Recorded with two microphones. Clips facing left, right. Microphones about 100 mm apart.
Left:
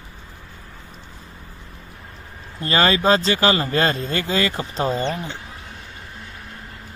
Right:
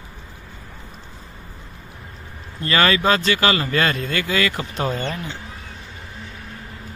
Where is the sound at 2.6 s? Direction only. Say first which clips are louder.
Even; 30° left (ahead or behind).